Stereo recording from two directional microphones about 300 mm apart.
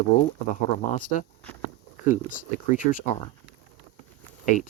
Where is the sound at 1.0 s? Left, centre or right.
Left.